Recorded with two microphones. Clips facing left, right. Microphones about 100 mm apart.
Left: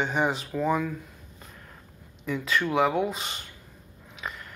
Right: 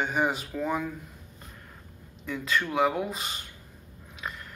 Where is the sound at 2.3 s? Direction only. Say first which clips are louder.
Left 3 dB; centre (ahead or behind).